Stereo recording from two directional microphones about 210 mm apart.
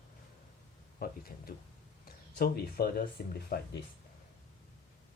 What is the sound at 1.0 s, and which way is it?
Speech, 45° left (ahead or behind).